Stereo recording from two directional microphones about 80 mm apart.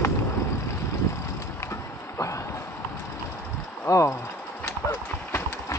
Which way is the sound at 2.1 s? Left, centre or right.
Left.